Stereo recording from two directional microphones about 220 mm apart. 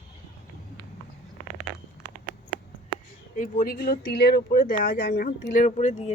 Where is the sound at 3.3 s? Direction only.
40° left (ahead or behind).